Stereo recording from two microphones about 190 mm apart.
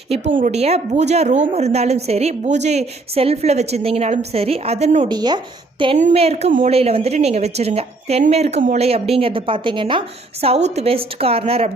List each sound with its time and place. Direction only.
0.3 s a woman's voice: 40° right (ahead or behind)
5.0 s speech: 20° right (ahead or behind)
6.0 s a woman's voice: 35° right (ahead or behind)